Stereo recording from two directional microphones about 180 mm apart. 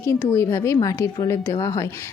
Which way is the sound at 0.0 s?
15° left (ahead or behind).